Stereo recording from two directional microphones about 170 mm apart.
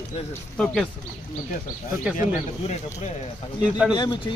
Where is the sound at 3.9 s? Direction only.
25° left (ahead or behind).